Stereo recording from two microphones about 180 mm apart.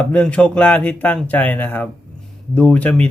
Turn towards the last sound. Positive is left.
turn(degrees=5)  # may be behind; listen again after turning